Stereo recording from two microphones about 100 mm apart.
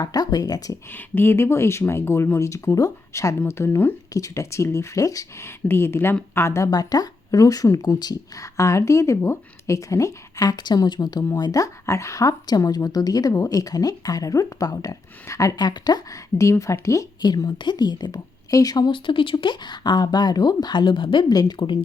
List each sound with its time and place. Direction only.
0.0 s speech: 40° left (ahead or behind)
0.9 s speech: 20° left (ahead or behind)
6.7 s speech: 40° left (ahead or behind)
15.5 s a woman's voice: 45° left (ahead or behind)
16.4 s a woman's voice: 30° left (ahead or behind); by 21.3 s 55° left (ahead or behind)
21.3 s a woman's voice: 45° left (ahead or behind)